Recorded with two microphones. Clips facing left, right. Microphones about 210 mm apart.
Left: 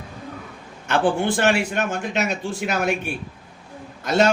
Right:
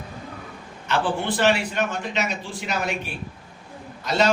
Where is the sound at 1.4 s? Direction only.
50° left (ahead or behind).